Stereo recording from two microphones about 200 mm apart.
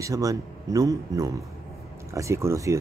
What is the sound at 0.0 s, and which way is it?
Speech, 15° right (ahead or behind).